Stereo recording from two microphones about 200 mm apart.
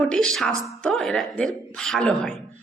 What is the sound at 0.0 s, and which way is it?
A woman's voice, 5° left (ahead or behind).